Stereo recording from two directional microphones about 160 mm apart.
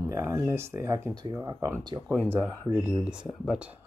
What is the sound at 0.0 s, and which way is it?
Speech, 15° right (ahead or behind).